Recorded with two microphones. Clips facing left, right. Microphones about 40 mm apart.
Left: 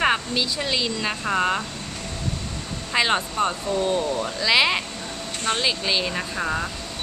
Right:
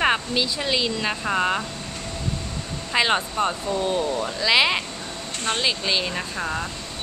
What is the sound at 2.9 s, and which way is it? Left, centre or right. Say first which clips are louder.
Speech: even; centre.